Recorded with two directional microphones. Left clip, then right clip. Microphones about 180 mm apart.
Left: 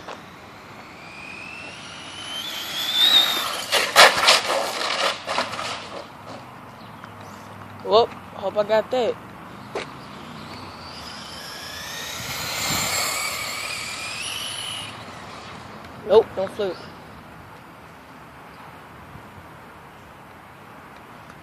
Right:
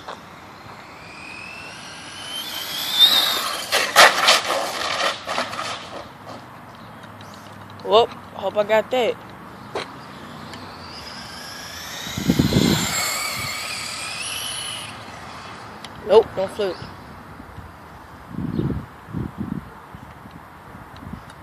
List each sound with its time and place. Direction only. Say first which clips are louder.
2.1 s vehicle: right 1 dB; 15° right (ahead or behind)
3.3 s a sound: right 1 dB; centre (ahead or behind)
7.8 s vehicle: right 2 dB; centre (ahead or behind)
8.4 s speech: right 2 dB; 5° right (ahead or behind)
9.7 s vehicle: right 2 dB; 5° right (ahead or behind)
11.0 s vehicle: right 1 dB; 5° left (ahead or behind); by 13.0 s 30° left (ahead or behind)
13.0 s a sound: right 1 dB; 10° left (ahead or behind)
16.1 s speech: right 2 dB; 5° right (ahead or behind)